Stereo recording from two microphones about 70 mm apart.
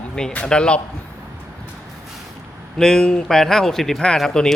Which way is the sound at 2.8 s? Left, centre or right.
Centre.